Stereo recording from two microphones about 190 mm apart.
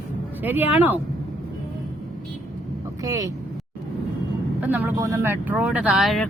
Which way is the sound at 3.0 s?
20° right (ahead or behind).